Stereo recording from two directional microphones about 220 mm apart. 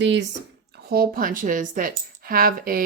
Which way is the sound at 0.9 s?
40° right (ahead or behind).